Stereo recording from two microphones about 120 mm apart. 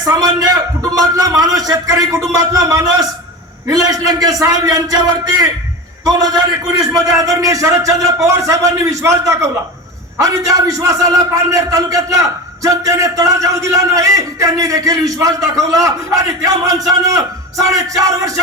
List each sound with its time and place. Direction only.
0.0 s a man's voice: 30° right (ahead or behind)
6.1 s a man's voice: 35° right (ahead or behind)